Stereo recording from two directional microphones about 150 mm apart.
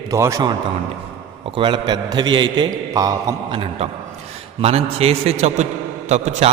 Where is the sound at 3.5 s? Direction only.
35° right (ahead or behind).